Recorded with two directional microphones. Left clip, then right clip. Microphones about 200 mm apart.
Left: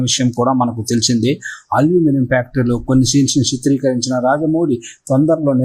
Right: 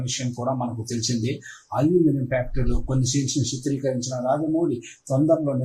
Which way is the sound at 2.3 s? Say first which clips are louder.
Left 10 dB; 45° left (ahead or behind).